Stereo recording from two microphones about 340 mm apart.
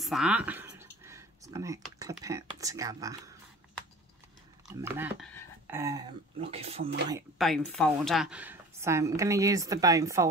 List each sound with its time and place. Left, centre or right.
0.0 s speech: centre
4.6 s speech: centre
7.1 s speech: centre